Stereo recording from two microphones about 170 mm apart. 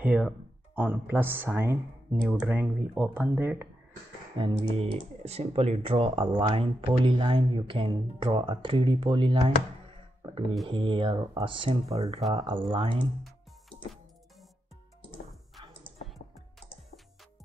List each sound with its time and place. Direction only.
0.0 s speech: 10° right (ahead or behind)
4.4 s speech: 30° right (ahead or behind)
10.7 s speech: 30° right (ahead or behind)